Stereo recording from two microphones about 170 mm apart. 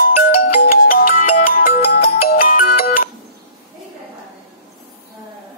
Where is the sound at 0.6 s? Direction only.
60° left (ahead or behind).